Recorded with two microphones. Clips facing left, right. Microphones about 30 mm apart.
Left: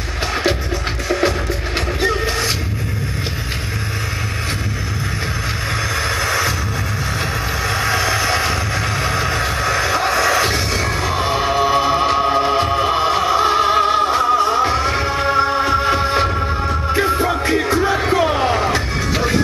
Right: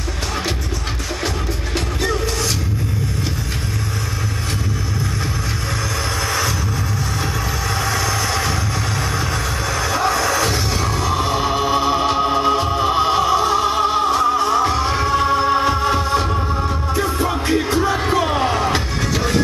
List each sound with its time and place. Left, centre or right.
2.0 s music: left
6.2 s a sound: left
7.6 s vehicle: left
9.0 s music: left; by 13.3 s centre
13.3 s music: left
15.0 s music: centre
17.6 s crowd: centre